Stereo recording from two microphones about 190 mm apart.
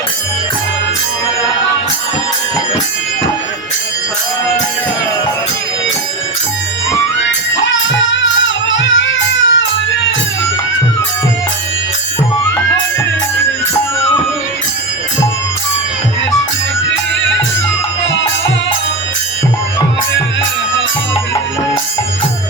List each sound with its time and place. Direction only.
7.2 s music: 80° left
18.0 s music: 80° left